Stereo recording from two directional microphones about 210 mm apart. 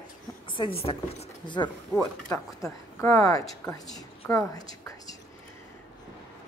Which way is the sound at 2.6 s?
15° left (ahead or behind).